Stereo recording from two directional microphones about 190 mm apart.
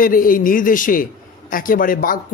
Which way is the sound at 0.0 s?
45° left (ahead or behind).